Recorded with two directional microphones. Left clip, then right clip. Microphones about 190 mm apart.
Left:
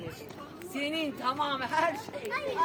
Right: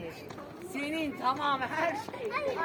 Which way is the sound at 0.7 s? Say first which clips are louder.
Left 2 dB; 50° right (ahead or behind).